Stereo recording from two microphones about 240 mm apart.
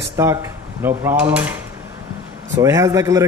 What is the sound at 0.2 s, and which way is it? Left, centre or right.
Speech, centre.